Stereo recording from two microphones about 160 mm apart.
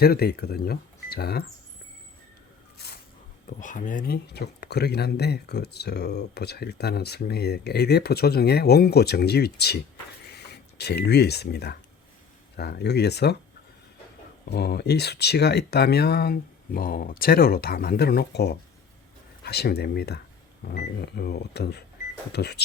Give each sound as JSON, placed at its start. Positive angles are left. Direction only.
{"t": 0.0, "sound": "speech", "side_deg": 75}
{"t": 2.7, "sound": "a sound", "side_deg": 80}
{"t": 3.6, "sound": "speech", "side_deg": 55}
{"t": 14.5, "sound": "speech", "side_deg": 90}